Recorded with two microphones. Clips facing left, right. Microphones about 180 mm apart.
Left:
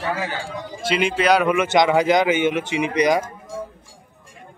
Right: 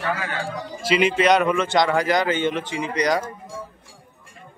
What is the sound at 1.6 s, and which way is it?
Speech, 15° left (ahead or behind).